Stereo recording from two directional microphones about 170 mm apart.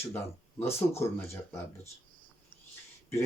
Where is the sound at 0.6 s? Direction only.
15° left (ahead or behind).